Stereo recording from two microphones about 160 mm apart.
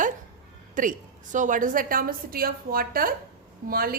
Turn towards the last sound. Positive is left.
turn(degrees=-65)  # may be behind; listen again after turning